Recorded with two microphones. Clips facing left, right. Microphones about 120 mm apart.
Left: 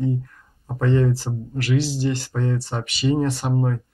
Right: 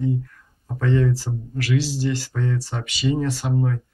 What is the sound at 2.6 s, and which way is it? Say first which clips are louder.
Speech: left 1 dB; 30° left (ahead or behind).